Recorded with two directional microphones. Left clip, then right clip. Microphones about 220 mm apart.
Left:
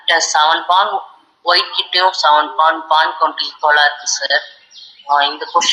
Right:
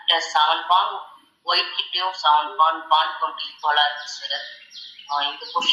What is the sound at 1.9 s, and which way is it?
Speech, 40° left (ahead or behind).